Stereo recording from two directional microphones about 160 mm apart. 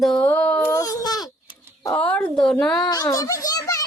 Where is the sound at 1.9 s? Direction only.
10° left (ahead or behind).